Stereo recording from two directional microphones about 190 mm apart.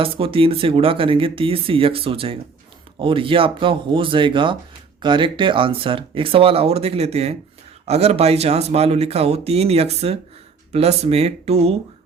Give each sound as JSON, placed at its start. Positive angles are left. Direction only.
{"t": 0.0, "sound": "speech", "side_deg": -30}